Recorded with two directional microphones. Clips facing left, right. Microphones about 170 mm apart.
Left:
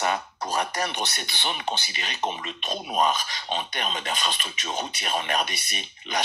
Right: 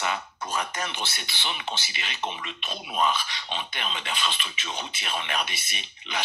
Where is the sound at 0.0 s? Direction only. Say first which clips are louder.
Left 4 dB; 40° left (ahead or behind).